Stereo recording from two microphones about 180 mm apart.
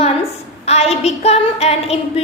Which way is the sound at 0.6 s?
35° left (ahead or behind).